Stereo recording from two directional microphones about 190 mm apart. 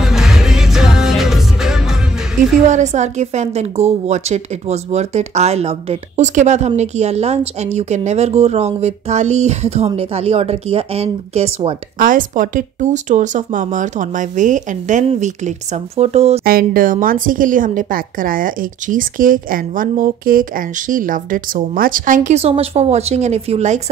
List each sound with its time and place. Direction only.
0.0 s music: centre (ahead or behind)
2.6 s a woman's voice: 40° right (ahead or behind)
12.0 s a woman's voice: 45° right (ahead or behind)
16.4 s a woman's voice: 50° right (ahead or behind)